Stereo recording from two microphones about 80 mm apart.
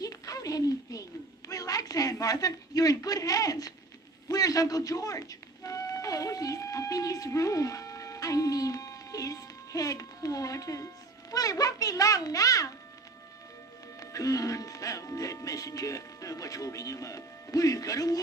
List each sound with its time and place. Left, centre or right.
0.0 s a sound: left
1.5 s a woman's voice: left
4.3 s music: left
11.3 s a child's voice: left
14.0 s speech: left